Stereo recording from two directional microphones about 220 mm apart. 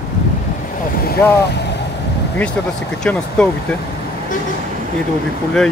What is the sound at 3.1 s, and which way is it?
Speech, 5° left (ahead or behind).